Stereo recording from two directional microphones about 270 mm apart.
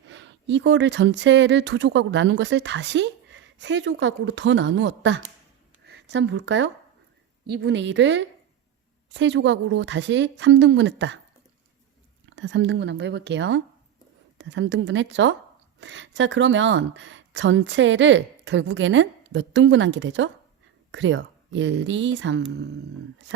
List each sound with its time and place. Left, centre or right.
0.1 s speech: right
12.4 s speech: right